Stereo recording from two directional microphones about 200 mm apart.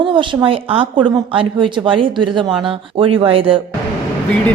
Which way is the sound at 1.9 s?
25° right (ahead or behind).